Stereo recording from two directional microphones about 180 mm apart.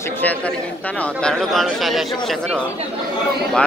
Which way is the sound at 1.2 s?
Centre (ahead or behind).